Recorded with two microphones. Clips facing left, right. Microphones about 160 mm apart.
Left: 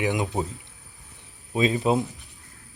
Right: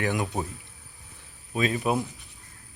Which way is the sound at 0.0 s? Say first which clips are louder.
Left 2 dB; 20° left (ahead or behind).